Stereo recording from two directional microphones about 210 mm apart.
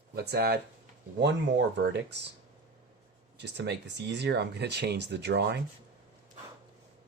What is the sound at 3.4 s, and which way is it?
Speech, 55° right (ahead or behind).